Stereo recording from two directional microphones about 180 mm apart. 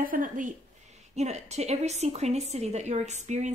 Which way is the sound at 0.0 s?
50° right (ahead or behind).